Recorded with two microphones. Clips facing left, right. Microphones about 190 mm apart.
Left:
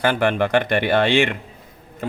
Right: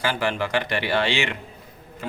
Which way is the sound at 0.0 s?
55° left (ahead or behind).